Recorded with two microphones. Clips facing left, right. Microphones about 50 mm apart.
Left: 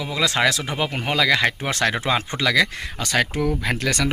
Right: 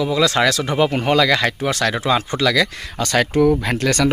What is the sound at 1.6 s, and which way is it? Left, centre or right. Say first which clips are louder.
Speech: right 3 dB; left.